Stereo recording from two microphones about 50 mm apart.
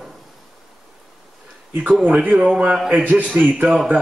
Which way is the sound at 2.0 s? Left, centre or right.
Right.